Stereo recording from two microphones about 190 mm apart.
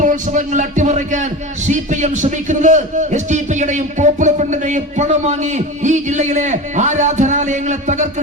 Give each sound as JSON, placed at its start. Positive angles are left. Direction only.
{"t": 0.0, "sound": "a man's voice", "side_deg": -40}